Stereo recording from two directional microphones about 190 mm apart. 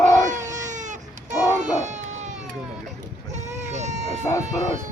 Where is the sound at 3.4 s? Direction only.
35° right (ahead or behind).